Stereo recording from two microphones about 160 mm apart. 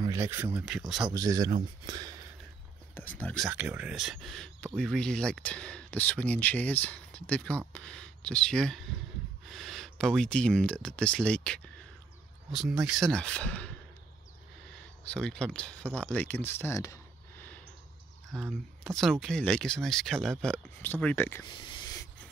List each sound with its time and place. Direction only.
0.0 s speech: 20° right (ahead or behind); by 1.1 s 5° right (ahead or behind)
1.1 s speech: 25° right (ahead or behind)
3.2 s speech: 10° left (ahead or behind)
3.4 s speech: 10° right (ahead or behind); by 13.7 s 10° left (ahead or behind)
15.0 s speech: 5° left (ahead or behind)
18.3 s speech: centre (ahead or behind)
21.5 s a sound: 30° left (ahead or behind)